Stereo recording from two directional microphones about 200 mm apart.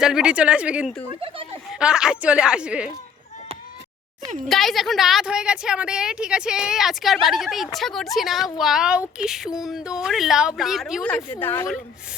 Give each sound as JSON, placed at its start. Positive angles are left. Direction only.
{"t": 0.0, "sound": "a woman's voice", "side_deg": -5}
{"t": 1.1, "sound": "speech", "side_deg": -25}
{"t": 1.8, "sound": "a woman's voice", "side_deg": -5}
{"t": 4.4, "sound": "a woman's voice", "side_deg": 0}